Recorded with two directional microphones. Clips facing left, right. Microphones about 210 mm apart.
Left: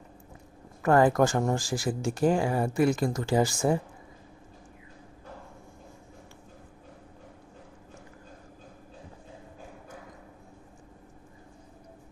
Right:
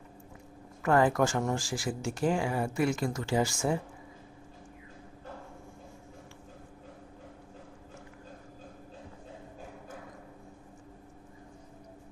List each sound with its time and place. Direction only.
0.8 s speech: 40° left (ahead or behind)